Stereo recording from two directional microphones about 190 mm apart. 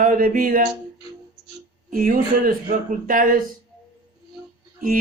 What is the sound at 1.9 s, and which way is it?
Speech, 45° right (ahead or behind).